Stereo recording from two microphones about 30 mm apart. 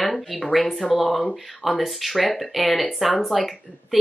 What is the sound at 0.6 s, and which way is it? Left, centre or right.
Speech, centre.